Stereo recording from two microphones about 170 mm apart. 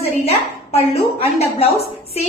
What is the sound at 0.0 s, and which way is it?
A woman's voice, 35° left (ahead or behind).